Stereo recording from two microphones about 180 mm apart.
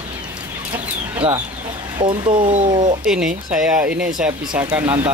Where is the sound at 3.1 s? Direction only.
5° right (ahead or behind).